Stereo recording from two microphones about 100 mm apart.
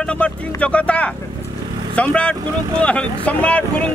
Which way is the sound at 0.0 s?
10° left (ahead or behind).